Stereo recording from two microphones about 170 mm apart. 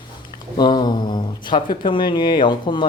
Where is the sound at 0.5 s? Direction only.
25° left (ahead or behind).